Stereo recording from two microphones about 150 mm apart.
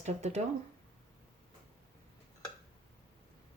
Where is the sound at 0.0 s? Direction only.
50° right (ahead or behind).